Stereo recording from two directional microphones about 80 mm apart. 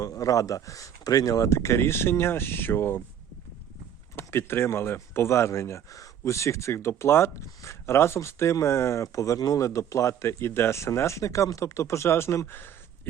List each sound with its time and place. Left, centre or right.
0.0 s speech: left
4.1 s speech: left